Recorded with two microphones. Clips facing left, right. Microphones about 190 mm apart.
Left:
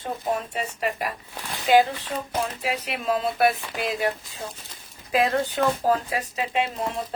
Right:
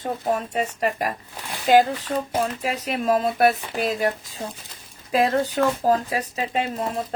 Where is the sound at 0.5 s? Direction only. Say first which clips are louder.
Right 4 dB; 45° right (ahead or behind).